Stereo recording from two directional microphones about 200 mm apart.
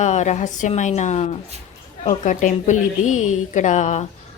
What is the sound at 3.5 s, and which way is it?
Speech, 35° left (ahead or behind).